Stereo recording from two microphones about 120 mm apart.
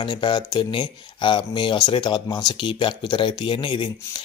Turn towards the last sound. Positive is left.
turn(degrees=45)  # may be behind; listen again after turning